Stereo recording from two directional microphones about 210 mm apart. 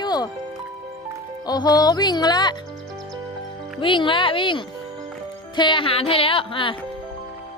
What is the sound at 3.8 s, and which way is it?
Speech, 25° left (ahead or behind).